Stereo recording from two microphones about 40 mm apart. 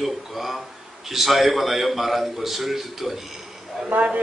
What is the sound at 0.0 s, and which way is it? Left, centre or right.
A man's voice, centre.